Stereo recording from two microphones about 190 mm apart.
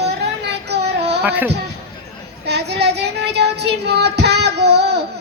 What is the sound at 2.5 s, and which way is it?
Child singing, 60° right (ahead or behind).